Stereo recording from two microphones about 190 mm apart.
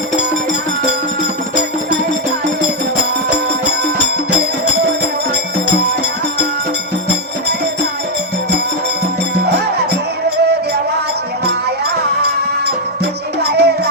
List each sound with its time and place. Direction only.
13.5 s music: 60° right (ahead or behind)